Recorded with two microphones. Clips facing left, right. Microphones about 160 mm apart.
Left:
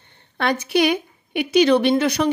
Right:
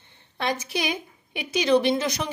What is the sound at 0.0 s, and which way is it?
A woman's voice, 65° left (ahead or behind).